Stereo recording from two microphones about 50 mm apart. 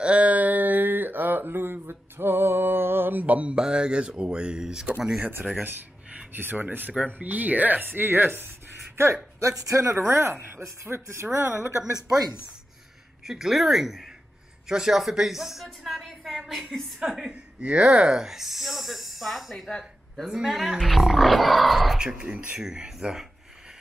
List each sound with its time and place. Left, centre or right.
0.0 s a sound: right
3.5 s speech: centre
6.3 s speech: right
8.9 s speech: right
9.4 s speech: right
13.2 s a woman's voice: centre
17.2 s a woman's voice: right; by 19.7 s centre
20.2 s a woman's voice: centre
21.9 s speech: centre
22.6 s speech: centre